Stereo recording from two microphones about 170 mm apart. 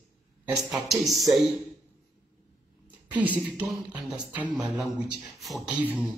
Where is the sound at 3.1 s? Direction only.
10° right (ahead or behind).